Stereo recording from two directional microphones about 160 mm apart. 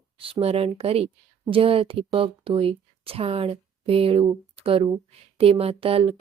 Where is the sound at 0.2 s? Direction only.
35° right (ahead or behind).